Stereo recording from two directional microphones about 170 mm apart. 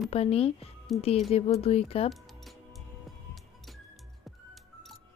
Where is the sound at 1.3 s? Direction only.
35° left (ahead or behind).